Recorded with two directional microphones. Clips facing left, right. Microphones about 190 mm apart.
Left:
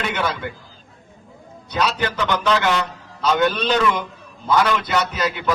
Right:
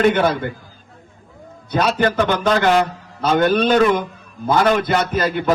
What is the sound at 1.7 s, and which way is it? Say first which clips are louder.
A man's voice: right 5 dB; 50° right (ahead or behind).